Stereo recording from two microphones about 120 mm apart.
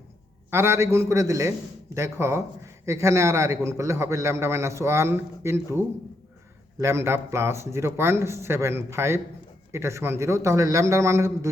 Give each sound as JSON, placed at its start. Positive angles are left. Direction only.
{"t": 0.5, "sound": "a man's voice", "side_deg": -20}